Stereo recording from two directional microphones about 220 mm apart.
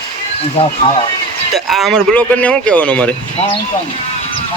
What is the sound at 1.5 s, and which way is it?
Speech, centre (ahead or behind).